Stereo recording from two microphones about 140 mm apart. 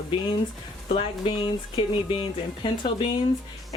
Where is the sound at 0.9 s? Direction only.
40° left (ahead or behind).